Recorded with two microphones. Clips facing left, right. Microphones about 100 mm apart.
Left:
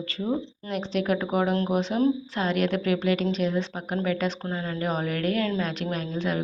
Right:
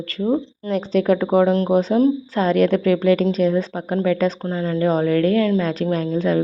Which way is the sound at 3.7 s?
35° right (ahead or behind).